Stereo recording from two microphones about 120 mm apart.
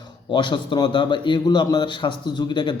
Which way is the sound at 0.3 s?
40° left (ahead or behind).